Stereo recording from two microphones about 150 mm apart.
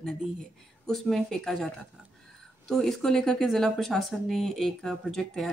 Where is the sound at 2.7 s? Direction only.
5° left (ahead or behind).